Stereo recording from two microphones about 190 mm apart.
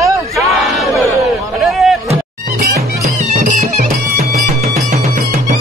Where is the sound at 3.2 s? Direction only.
40° right (ahead or behind).